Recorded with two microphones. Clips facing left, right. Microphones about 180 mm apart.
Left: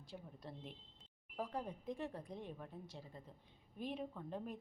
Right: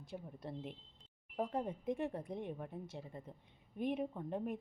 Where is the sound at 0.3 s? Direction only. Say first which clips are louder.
Right 8 dB; 60° right (ahead or behind).